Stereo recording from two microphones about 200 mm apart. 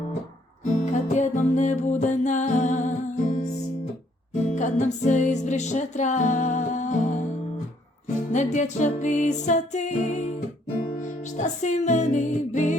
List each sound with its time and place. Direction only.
0.8 s music: 35° left (ahead or behind)
4.4 s music: 40° left (ahead or behind)
8.3 s music: 35° left (ahead or behind)
11.3 s music: 35° left (ahead or behind)